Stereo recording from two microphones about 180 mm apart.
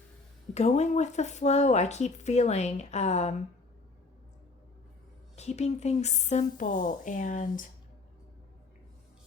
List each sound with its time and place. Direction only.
0.5 s speech: 40° left (ahead or behind)
5.4 s a woman's voice: 40° left (ahead or behind)